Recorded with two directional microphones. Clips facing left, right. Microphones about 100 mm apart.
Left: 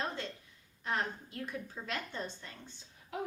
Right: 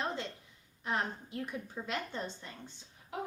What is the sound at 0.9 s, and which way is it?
A woman's voice, 15° right (ahead or behind).